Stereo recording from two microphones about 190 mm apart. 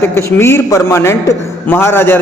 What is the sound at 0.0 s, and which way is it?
A man's voice, 15° left (ahead or behind).